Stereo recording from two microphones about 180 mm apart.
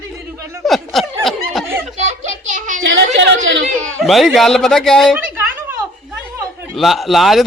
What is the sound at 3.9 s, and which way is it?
Speech, centre (ahead or behind).